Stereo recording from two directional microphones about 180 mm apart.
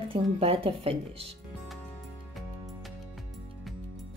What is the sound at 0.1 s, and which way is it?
Speech, 30° right (ahead or behind).